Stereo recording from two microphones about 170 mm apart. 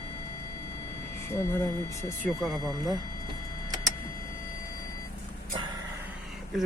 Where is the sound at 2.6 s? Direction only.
20° right (ahead or behind).